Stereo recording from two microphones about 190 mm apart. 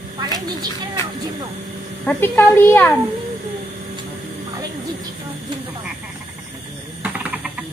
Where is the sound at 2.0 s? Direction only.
10° left (ahead or behind).